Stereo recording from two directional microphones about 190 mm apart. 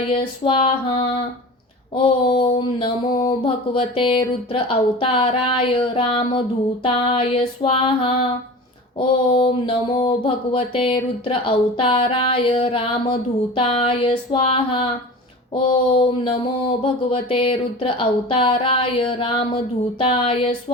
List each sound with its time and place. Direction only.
0.1 s speech: 25° left (ahead or behind)
2.0 s speech: 30° left (ahead or behind)